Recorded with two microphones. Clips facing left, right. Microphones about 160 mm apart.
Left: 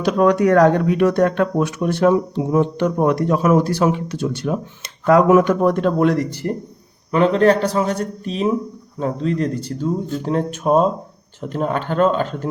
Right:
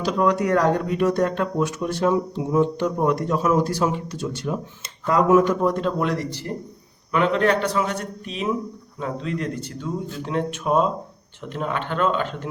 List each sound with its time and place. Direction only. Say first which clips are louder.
0.0 s speech: left 6 dB; 65° left (ahead or behind)
7.1 s speech: left 5 dB; 35° left (ahead or behind)